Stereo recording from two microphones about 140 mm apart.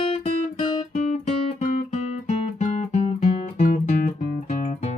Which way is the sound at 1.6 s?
55° left (ahead or behind).